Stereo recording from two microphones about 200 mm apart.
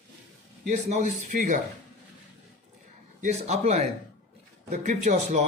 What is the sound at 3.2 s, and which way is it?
A man's voice, 35° right (ahead or behind).